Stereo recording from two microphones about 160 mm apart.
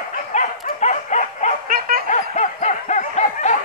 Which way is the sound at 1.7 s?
65° right (ahead or behind).